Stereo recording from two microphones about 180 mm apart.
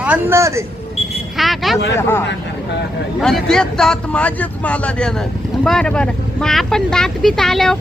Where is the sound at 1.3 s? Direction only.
Centre (ahead or behind).